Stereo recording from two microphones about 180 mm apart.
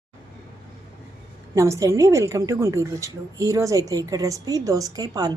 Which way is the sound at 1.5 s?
15° right (ahead or behind).